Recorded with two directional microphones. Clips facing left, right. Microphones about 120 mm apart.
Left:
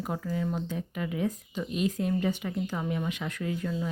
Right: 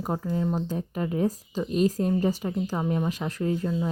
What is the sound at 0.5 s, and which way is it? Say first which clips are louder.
Speech: right 4 dB; 35° right (ahead or behind).